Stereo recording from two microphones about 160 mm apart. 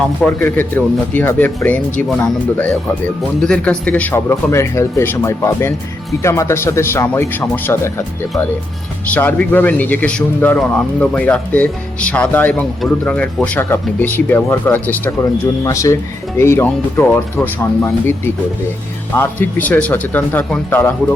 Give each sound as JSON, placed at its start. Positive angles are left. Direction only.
{"t": 0.2, "sound": "speech", "side_deg": 10}
{"t": 3.4, "sound": "speech", "side_deg": 5}
{"t": 9.1, "sound": "speech", "side_deg": 10}
{"t": 19.1, "sound": "speech", "side_deg": 15}